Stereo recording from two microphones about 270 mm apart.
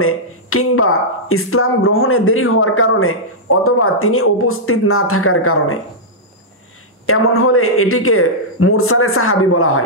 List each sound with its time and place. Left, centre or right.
0.0 s speech: left
7.1 s speech: left